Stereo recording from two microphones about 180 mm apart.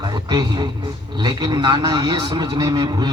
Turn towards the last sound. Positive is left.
turn(degrees=-25)  # may be behind; listen again after turning